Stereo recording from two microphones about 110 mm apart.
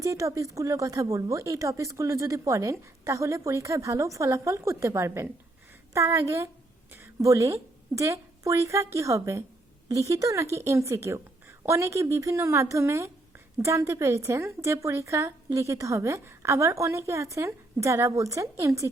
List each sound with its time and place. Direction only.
0.0 s a woman's voice: 30° right (ahead or behind)